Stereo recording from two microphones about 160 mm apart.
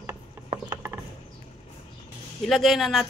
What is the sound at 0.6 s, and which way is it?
Pulleys, 15° right (ahead or behind).